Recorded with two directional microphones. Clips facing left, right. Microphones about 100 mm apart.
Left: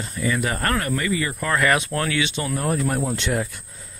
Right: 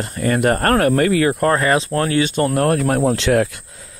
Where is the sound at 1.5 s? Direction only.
30° right (ahead or behind); by 3.5 s 90° right.